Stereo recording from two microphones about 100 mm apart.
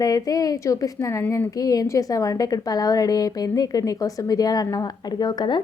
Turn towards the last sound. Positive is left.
turn(degrees=50)  # may be behind; listen again after turning